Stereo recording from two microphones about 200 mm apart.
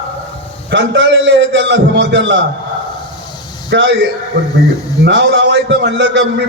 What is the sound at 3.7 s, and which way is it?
Speech, 60° right (ahead or behind).